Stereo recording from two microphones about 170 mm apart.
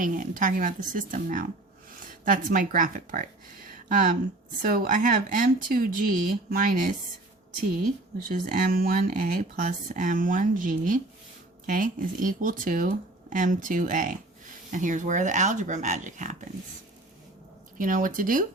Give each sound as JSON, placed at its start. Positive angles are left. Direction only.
{"t": 0.0, "sound": "a woman's voice", "side_deg": -50}
{"t": 8.3, "sound": "speech", "side_deg": -50}
{"t": 17.7, "sound": "speech", "side_deg": -50}